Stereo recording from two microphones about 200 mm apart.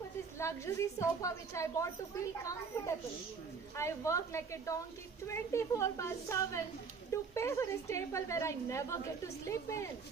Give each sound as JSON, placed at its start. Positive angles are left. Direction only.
{"t": 0.3, "sound": "a woman's voice", "side_deg": 15}